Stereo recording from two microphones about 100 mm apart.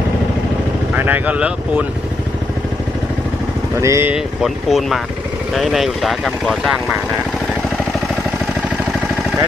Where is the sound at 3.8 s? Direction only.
30° right (ahead or behind).